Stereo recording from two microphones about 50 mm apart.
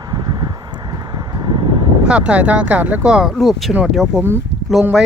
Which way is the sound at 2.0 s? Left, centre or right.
Right.